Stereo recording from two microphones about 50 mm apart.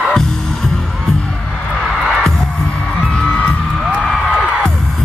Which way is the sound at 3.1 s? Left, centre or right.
Centre.